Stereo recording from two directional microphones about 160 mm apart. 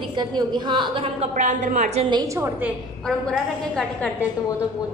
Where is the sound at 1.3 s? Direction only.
50° right (ahead or behind).